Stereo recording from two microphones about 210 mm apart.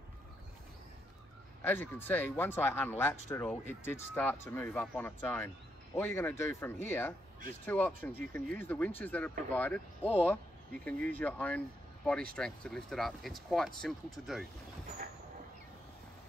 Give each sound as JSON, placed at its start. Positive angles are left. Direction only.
{"t": 1.6, "sound": "speech", "side_deg": 10}